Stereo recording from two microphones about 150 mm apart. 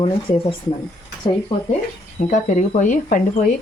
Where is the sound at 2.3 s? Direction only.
55° left (ahead or behind).